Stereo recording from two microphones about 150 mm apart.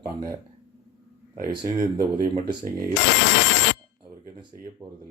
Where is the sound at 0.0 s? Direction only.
25° right (ahead or behind).